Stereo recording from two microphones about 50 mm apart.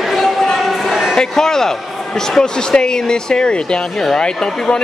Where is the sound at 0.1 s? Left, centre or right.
Centre.